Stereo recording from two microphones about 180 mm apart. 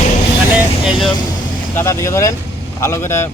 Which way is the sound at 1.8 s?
15° left (ahead or behind).